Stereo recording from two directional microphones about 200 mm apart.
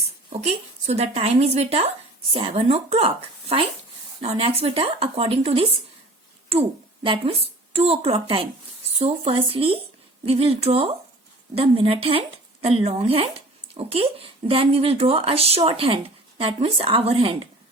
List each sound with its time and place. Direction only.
0.3 s speech: 30° right (ahead or behind)